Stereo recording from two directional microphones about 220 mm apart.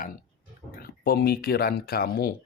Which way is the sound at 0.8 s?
45° left (ahead or behind).